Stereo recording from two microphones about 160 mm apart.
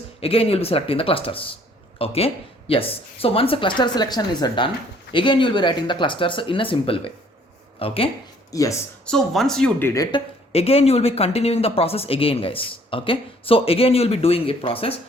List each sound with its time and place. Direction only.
0.2 s speech: 35° left (ahead or behind)
9.0 s speech: centre (ahead or behind); by 10.2 s 20° left (ahead or behind)
10.5 s speech: 40° left (ahead or behind)